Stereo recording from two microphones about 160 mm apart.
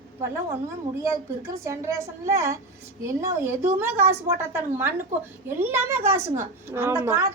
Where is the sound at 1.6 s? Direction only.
20° right (ahead or behind).